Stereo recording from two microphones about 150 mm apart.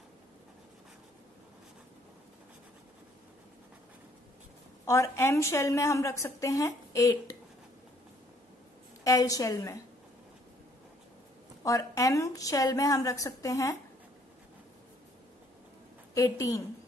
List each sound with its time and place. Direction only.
4.8 s a woman's voice: 20° left (ahead or behind)
9.0 s a woman's voice: 25° left (ahead or behind)
11.6 s a woman's voice: 20° left (ahead or behind)
16.2 s a woman's voice: 20° left (ahead or behind)